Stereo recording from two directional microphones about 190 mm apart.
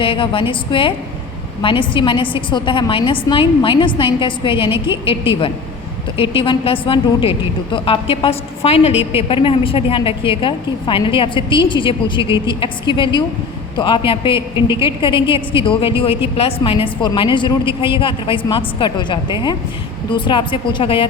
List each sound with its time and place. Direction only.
0.0 s a woman's voice: 25° left (ahead or behind)